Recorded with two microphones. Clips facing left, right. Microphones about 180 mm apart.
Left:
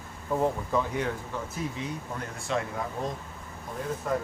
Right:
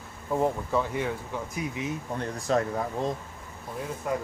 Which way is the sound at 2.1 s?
40° right (ahead or behind).